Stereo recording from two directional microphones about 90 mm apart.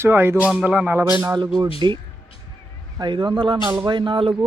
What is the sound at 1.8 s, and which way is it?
Speech, 55° right (ahead or behind).